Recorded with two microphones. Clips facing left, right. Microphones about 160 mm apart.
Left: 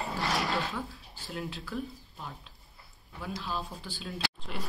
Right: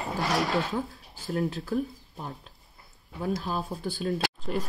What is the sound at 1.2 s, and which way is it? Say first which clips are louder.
Speech: right 9 dB; 45° right (ahead or behind).